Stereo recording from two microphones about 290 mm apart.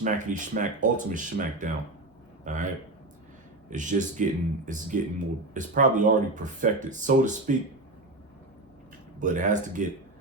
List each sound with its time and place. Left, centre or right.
0.0 s a man's voice: right
3.7 s speech: right
9.2 s speech: right